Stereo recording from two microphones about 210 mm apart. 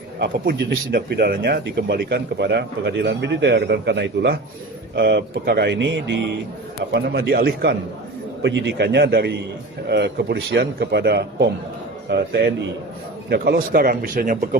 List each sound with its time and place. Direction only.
0.2 s a man's voice: 55° right (ahead or behind)